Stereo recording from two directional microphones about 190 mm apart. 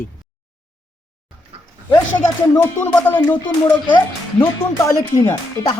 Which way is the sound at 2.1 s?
10° left (ahead or behind).